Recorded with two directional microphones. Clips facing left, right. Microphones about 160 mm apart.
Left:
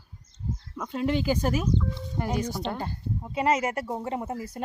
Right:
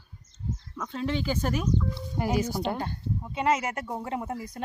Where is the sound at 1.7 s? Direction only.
5° right (ahead or behind).